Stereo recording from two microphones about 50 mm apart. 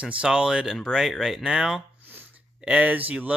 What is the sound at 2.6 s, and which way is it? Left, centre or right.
Speech, right.